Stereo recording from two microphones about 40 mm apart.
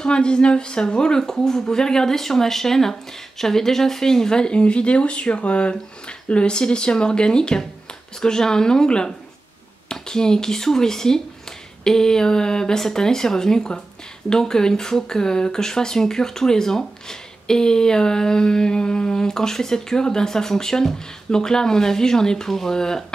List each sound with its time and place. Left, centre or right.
0.0 s speech: left